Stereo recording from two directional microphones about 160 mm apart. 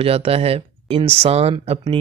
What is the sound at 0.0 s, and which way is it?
Speech, 40° right (ahead or behind).